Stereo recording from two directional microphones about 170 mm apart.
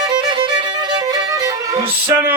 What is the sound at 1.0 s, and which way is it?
Music, 20° right (ahead or behind).